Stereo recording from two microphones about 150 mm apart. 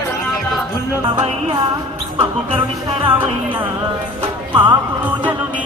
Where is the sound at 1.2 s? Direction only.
40° right (ahead or behind).